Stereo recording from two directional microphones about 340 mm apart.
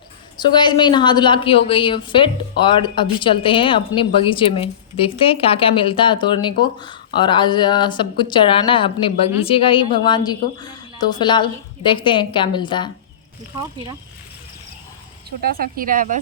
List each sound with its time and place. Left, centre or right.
0.3 s a woman's voice: centre
15.4 s speech: right